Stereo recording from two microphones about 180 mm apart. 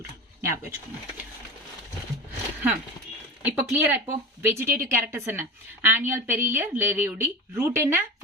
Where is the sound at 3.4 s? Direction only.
10° right (ahead or behind).